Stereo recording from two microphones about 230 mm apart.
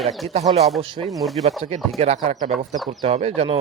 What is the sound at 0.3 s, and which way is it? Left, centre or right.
Speech, right.